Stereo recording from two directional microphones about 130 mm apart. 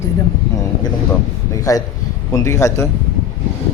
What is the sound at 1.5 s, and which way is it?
A man's voice, 25° left (ahead or behind).